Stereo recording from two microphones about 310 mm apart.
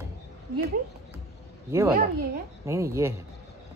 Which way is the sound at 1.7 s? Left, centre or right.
Centre.